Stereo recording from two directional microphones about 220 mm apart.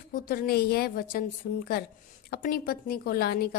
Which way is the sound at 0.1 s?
40° left (ahead or behind).